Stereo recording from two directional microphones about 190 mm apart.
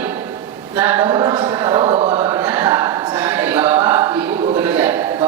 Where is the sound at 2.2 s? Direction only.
10° right (ahead or behind).